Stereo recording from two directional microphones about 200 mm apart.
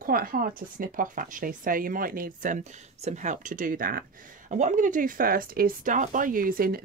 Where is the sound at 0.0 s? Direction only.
45° right (ahead or behind).